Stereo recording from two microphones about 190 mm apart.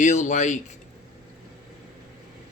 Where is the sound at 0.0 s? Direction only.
40° left (ahead or behind).